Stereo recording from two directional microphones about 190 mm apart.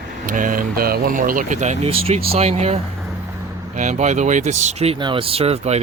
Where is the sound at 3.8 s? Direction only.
40° right (ahead or behind).